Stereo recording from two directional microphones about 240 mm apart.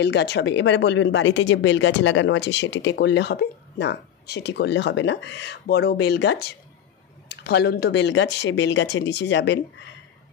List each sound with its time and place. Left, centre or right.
0.0 s speech: left